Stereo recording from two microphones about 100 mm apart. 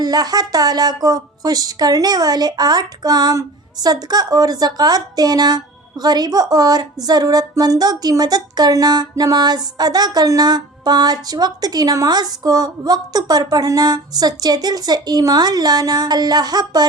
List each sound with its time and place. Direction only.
0.0 s a woman's voice: 40° right (ahead or behind)